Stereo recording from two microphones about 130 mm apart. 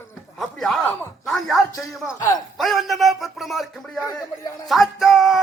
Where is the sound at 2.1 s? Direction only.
25° left (ahead or behind).